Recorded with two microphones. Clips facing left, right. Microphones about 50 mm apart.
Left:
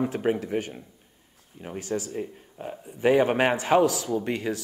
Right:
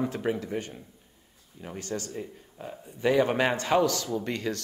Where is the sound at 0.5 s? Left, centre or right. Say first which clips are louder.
Left 5 dB; left.